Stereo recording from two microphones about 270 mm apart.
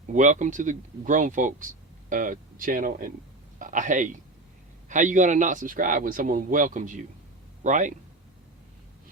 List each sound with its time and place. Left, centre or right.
0.1 s speech: right